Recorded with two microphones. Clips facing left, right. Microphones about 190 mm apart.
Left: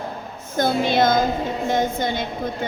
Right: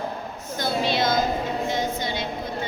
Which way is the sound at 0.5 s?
50° left (ahead or behind).